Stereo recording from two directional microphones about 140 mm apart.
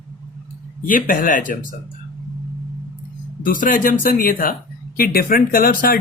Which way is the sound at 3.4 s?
75° left (ahead or behind).